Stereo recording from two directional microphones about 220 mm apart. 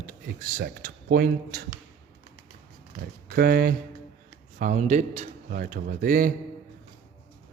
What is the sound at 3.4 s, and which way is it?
Speech, 40° right (ahead or behind).